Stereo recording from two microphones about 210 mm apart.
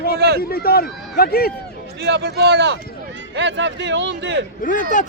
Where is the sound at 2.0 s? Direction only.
55° right (ahead or behind).